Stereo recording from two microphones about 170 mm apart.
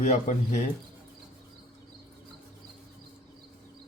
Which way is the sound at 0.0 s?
45° left (ahead or behind).